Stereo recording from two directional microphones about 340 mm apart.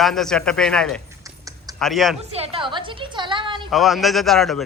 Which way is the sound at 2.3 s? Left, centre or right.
Centre.